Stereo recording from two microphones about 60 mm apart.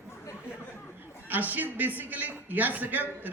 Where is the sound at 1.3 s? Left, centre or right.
Right.